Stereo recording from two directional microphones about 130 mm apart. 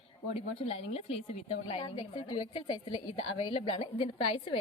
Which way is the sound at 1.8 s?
35° left (ahead or behind).